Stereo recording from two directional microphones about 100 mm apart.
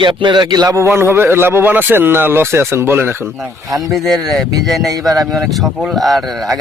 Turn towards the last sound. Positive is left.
turn(degrees=0)  # may be behind; listen again after turning